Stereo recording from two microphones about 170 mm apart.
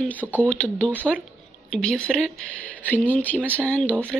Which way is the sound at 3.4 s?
10° right (ahead or behind).